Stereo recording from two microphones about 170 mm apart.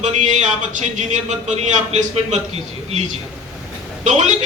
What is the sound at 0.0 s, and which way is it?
Speech, 45° right (ahead or behind).